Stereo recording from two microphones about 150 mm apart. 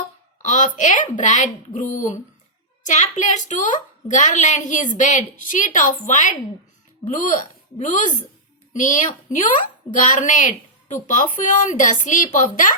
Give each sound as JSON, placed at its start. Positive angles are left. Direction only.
{"t": 0.4, "sound": "a woman's voice", "side_deg": 55}